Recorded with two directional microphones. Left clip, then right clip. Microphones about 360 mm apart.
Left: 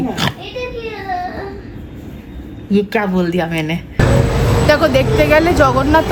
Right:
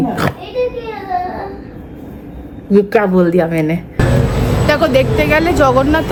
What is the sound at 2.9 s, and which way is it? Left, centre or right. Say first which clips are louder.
Speech: right 5 dB; centre.